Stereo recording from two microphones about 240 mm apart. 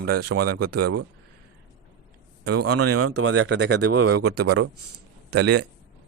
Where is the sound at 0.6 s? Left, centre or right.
Right.